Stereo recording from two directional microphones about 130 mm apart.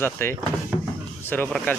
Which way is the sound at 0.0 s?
20° left (ahead or behind).